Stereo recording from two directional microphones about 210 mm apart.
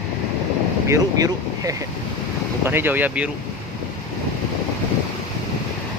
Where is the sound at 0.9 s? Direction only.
15° right (ahead or behind).